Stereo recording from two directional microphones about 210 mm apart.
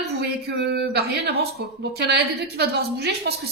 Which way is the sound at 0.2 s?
50° right (ahead or behind).